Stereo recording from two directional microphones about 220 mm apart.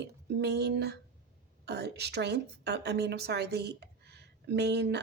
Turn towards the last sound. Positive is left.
turn(degrees=-50)  # may be behind; listen again after turning